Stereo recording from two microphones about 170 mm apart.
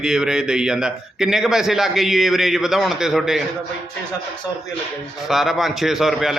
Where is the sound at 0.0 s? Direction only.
5° right (ahead or behind).